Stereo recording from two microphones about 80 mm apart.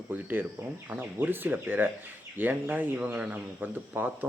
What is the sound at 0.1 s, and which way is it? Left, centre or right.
Speech, right.